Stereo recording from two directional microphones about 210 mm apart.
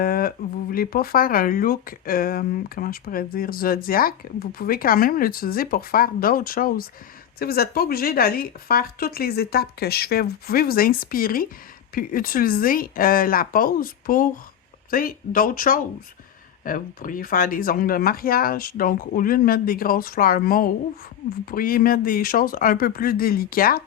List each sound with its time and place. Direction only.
0.0 s speech: 45° left (ahead or behind)